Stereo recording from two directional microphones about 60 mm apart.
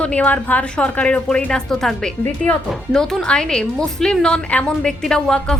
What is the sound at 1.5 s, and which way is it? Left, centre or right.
A woman's voice, centre.